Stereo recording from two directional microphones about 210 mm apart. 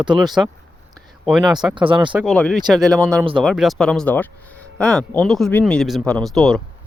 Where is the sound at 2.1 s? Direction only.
Centre (ahead or behind).